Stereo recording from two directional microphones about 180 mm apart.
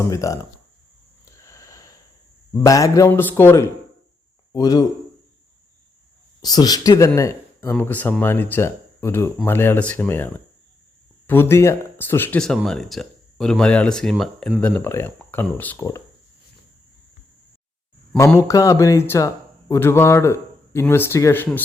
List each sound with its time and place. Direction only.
0.0 s speech: 15° left (ahead or behind)
1.2 s sniff: 15° left (ahead or behind)
2.5 s speech: 20° left (ahead or behind)
6.4 s speech: 20° left (ahead or behind)
18.3 s speech: 15° left (ahead or behind)